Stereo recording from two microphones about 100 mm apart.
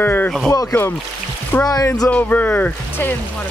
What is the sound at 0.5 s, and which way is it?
Speech, 40° left (ahead or behind).